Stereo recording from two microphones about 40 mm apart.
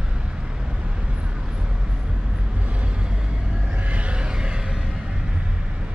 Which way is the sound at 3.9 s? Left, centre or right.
Right.